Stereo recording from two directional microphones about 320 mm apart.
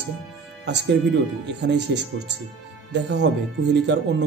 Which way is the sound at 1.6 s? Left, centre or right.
Right.